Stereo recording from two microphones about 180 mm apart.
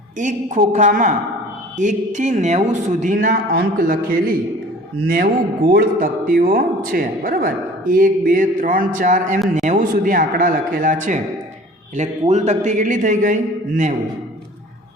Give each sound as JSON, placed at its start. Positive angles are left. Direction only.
{"t": 0.2, "sound": "a man's voice", "side_deg": -45}
{"t": 5.0, "sound": "a man's voice", "side_deg": -55}
{"t": 12.3, "sound": "a man's voice", "side_deg": -40}